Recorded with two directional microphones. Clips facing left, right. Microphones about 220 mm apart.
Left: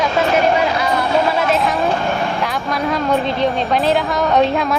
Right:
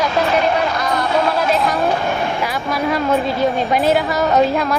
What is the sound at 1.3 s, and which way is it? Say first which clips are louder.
A woman's voice: even; centre (ahead or behind).